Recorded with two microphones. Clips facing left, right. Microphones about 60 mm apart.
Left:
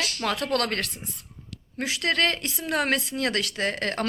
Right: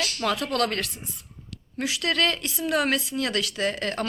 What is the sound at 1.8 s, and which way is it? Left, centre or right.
A man's voice, left.